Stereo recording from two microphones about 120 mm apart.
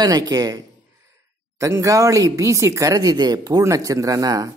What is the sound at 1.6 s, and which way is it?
Speech, 25° right (ahead or behind).